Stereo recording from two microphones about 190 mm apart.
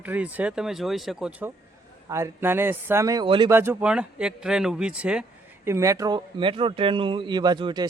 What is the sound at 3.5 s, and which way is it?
Speech, 10° right (ahead or behind).